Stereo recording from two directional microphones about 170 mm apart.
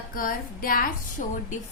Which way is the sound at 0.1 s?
55° left (ahead or behind).